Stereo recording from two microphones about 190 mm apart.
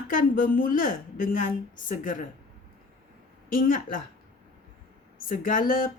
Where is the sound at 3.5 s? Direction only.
45° left (ahead or behind).